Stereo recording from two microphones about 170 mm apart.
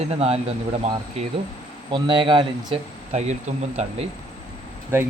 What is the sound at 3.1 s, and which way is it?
Speech, 40° right (ahead or behind).